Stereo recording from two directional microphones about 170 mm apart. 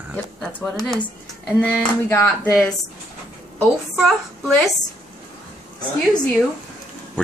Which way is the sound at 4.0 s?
Centre (ahead or behind).